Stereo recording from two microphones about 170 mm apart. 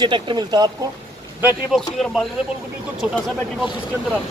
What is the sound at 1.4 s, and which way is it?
Speech, centre (ahead or behind).